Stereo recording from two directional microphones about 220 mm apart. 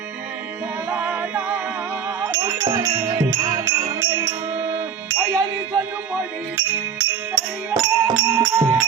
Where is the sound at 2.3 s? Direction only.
15° right (ahead or behind).